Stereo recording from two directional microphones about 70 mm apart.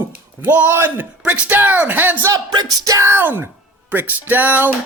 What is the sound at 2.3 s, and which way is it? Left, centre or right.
Music, right.